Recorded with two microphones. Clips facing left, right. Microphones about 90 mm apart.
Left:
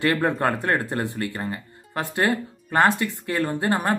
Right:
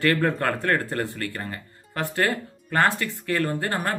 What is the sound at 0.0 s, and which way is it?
Speech, 20° left (ahead or behind).